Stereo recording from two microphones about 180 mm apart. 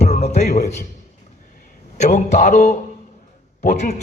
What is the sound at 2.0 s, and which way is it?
Speech, 40° left (ahead or behind).